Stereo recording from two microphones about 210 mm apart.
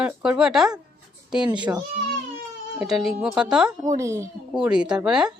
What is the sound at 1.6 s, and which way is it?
Speech, 15° right (ahead or behind).